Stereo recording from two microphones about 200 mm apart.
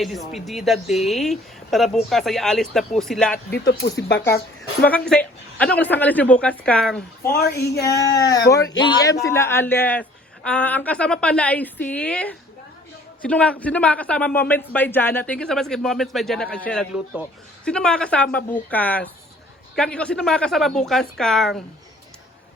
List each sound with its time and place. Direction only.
0.0 s a man's voice: centre (ahead or behind)
4.8 s a man's voice: 5° left (ahead or behind)
7.3 s speech: 50° left (ahead or behind)
8.5 s a man's voice: 20° left (ahead or behind); by 21.6 s centre (ahead or behind)